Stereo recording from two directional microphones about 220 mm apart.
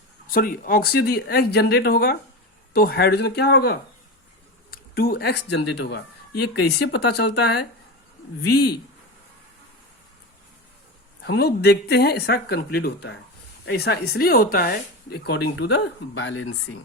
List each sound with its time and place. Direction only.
0.3 s speech: 40° left (ahead or behind)
11.3 s speech: 45° left (ahead or behind)